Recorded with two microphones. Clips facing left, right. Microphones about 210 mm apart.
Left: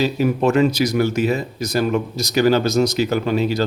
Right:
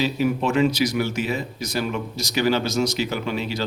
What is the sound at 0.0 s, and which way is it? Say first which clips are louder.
Speech: left 4 dB; 45° left (ahead or behind).